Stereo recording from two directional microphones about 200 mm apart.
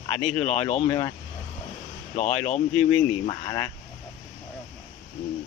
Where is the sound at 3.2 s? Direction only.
20° left (ahead or behind).